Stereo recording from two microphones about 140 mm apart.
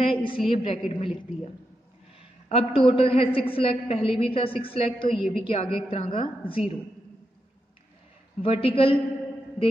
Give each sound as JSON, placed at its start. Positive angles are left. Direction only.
{"t": 0.0, "sound": "a woman's voice", "side_deg": 40}
{"t": 2.5, "sound": "a woman's voice", "side_deg": 40}
{"t": 8.4, "sound": "a woman's voice", "side_deg": 40}